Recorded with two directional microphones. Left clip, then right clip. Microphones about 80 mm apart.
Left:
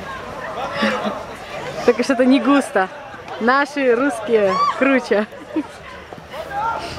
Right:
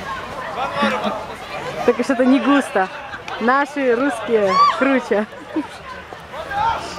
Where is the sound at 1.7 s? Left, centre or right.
Left.